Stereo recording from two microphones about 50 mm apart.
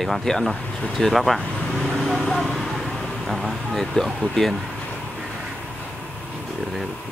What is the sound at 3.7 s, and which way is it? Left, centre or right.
Speech, centre.